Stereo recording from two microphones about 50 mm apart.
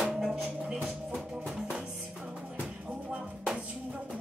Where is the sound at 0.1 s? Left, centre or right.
Centre.